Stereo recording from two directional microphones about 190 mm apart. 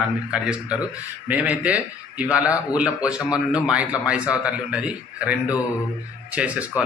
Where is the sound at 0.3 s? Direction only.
5° right (ahead or behind).